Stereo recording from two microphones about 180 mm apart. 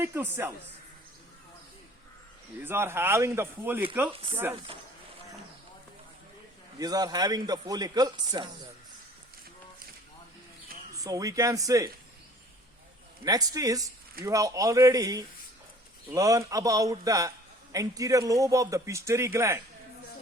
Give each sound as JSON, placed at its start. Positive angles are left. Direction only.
{"t": 0.0, "sound": "speech", "side_deg": -15}
{"t": 2.6, "sound": "speech", "side_deg": -10}
{"t": 4.7, "sound": "speech", "side_deg": -30}
{"t": 6.7, "sound": "a man's voice", "side_deg": -20}
{"t": 11.0, "sound": "a man's voice", "side_deg": -20}
{"t": 13.2, "sound": "a man's voice", "side_deg": -20}